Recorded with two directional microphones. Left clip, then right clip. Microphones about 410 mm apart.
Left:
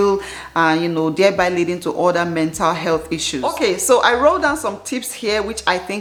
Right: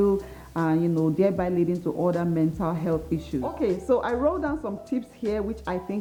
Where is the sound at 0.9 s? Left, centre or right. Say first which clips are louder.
Left 8 dB; centre.